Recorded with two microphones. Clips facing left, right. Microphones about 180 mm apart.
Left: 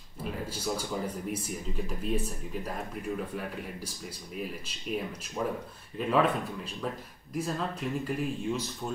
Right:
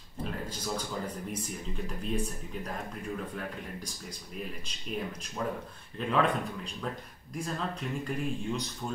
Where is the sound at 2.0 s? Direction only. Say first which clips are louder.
Left 1 dB; 5° left (ahead or behind).